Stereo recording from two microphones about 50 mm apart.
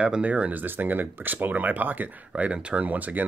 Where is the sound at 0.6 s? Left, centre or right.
Right.